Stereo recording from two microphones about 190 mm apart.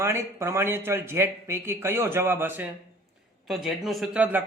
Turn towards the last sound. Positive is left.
turn(degrees=-5)  # may be behind; listen again after turning